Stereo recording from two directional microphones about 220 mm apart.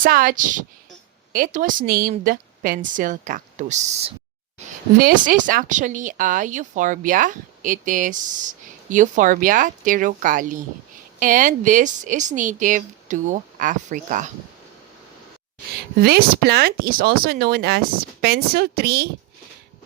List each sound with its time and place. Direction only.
0.0 s speech: 40° right (ahead or behind)
16.0 s speech: 45° right (ahead or behind)